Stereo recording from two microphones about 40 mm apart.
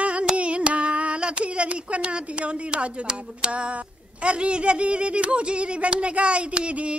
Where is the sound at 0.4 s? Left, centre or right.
Right.